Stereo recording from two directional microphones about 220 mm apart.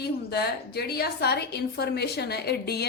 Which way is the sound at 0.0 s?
45° left (ahead or behind).